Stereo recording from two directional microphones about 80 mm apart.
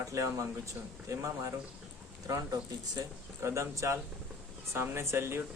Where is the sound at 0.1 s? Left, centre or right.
Right.